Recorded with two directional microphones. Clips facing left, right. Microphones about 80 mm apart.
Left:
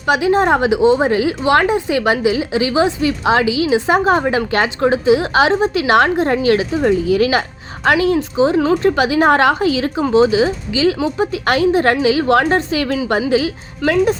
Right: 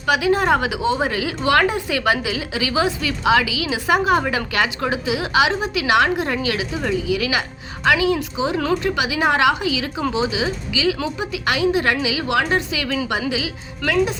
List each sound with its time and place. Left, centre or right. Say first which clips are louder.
0.0 s a woman's voice: left 4 dB; left